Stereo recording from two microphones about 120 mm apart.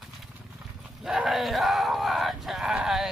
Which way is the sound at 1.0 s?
5° right (ahead or behind).